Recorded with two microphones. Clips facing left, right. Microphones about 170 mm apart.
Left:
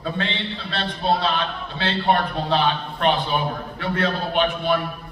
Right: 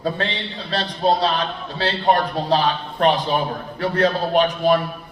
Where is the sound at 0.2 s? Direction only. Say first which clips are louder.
Right 1 dB; 40° right (ahead or behind).